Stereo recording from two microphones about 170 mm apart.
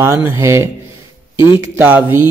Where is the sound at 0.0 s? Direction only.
15° right (ahead or behind).